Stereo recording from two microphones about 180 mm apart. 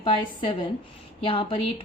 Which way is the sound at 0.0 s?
30° left (ahead or behind).